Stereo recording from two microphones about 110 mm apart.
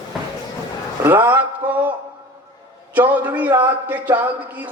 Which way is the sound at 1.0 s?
20° right (ahead or behind).